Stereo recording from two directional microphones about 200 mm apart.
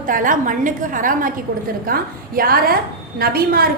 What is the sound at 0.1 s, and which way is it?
A woman's voice, 40° right (ahead or behind).